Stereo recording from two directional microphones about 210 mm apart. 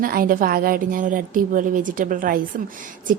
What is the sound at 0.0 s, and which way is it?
A woman's voice, 40° right (ahead or behind).